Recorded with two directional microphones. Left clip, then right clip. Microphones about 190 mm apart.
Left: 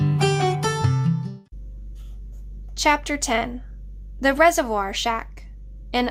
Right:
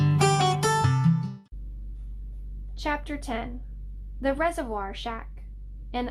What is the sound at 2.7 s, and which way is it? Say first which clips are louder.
A woman's voice: left 10 dB; 25° left (ahead or behind).